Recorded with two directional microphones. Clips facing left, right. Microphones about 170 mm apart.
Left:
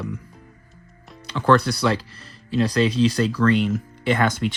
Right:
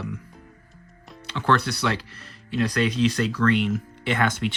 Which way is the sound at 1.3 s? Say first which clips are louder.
Left 5 dB; 40° left (ahead or behind).